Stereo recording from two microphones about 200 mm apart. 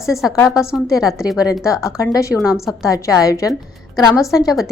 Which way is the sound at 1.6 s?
15° left (ahead or behind).